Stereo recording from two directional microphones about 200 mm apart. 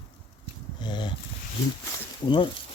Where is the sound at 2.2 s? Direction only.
25° left (ahead or behind).